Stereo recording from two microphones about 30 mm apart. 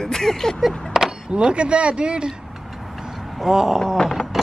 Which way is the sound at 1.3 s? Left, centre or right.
Right.